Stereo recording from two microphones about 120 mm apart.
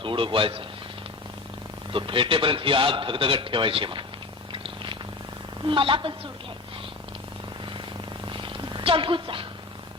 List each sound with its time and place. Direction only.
0.0 s a man's voice: 45° right (ahead or behind)
1.9 s a man's voice: 45° right (ahead or behind)
4.5 s purr: 45° right (ahead or behind)
5.6 s a man's voice: 45° right (ahead or behind)
8.3 s purr: 45° right (ahead or behind)